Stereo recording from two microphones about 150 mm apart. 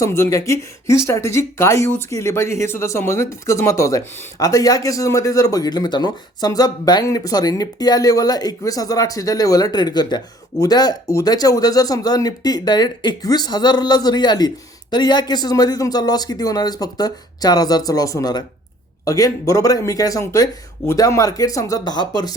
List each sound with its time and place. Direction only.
0.0 s speech: 20° left (ahead or behind)